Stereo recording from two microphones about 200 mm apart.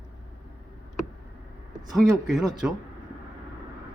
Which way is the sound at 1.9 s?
Centre (ahead or behind).